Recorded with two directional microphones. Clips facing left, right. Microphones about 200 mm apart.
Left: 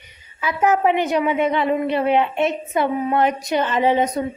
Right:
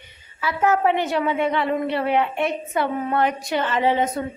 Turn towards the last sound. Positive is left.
turn(degrees=15)  # may be behind; listen again after turning